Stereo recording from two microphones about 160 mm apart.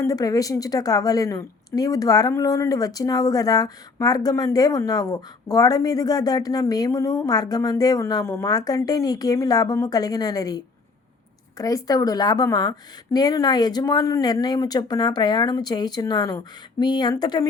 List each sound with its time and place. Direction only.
0.0 s a woman's voice: 20° left (ahead or behind)